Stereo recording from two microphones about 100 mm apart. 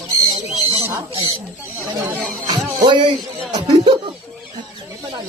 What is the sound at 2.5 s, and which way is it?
Music, 55° right (ahead or behind).